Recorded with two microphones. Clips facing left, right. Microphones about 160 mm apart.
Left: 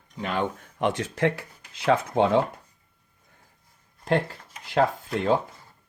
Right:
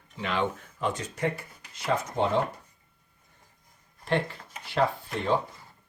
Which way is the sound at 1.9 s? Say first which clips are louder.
Left 4 dB; 75° left (ahead or behind).